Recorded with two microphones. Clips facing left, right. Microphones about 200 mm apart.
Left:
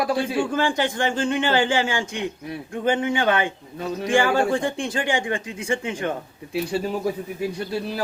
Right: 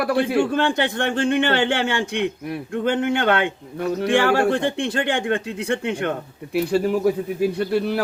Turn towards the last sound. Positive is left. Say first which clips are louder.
# right 6 dB
turn(degrees=-65)  # may be behind; listen again after turning